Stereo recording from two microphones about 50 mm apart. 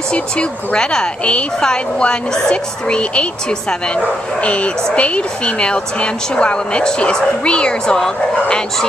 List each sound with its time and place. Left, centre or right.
0.1 s a woman's voice: left